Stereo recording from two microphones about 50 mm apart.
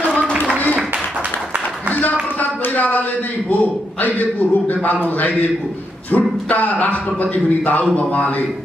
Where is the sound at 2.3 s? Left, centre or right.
Left.